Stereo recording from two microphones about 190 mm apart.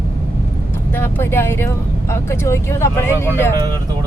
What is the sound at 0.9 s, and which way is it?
Speech, 10° left (ahead or behind).